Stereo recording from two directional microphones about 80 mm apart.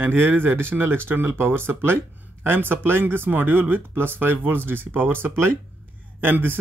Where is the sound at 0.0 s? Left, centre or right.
Right.